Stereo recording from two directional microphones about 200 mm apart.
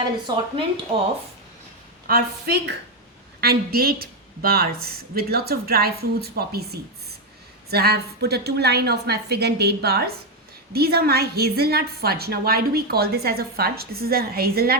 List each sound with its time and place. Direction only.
0.0 s a woman's voice: 20° right (ahead or behind)
2.0 s a woman's voice: 50° right (ahead or behind)